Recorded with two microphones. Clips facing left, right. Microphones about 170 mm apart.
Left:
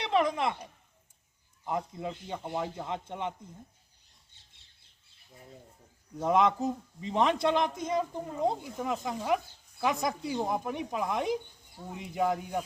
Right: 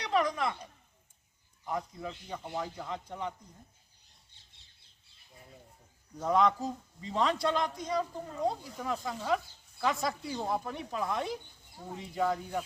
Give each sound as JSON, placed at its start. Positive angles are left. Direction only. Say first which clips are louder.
{"t": 0.0, "sound": "speech", "louder": "left 2 dB", "side_deg": 25}
{"t": 1.6, "sound": "a man's voice", "louder": "left 3 dB", "side_deg": 25}
{"t": 6.1, "sound": "a man's voice", "louder": "left 2 dB", "side_deg": 20}